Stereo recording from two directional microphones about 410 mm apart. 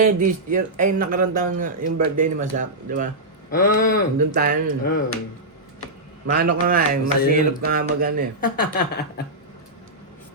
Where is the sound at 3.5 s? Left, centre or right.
Centre.